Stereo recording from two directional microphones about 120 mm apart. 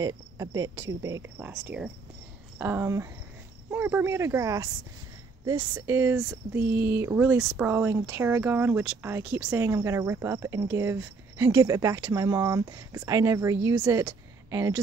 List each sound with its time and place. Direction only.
0.0 s speech: 30° right (ahead or behind)
5.8 s a woman's voice: 20° right (ahead or behind)